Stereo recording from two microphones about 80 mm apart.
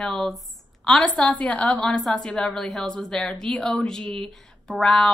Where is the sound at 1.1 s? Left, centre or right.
Centre.